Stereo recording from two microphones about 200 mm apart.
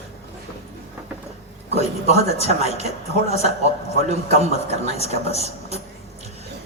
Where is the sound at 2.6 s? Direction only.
30° left (ahead or behind).